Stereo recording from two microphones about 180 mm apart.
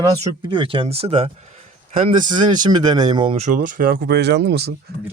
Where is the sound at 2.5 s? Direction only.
25° right (ahead or behind); by 4.8 s 65° right (ahead or behind).